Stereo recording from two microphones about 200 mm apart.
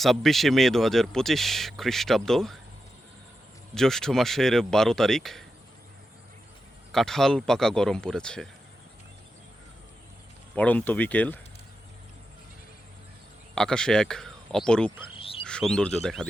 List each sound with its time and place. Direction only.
0.0 s speech: centre (ahead or behind)
3.8 s speech: centre (ahead or behind)
6.9 s speech: centre (ahead or behind)
10.5 s speech: 5° left (ahead or behind)
13.6 s speech: 5° left (ahead or behind)
15.1 s bird: 25° left (ahead or behind)
15.4 s speech: 5° left (ahead or behind)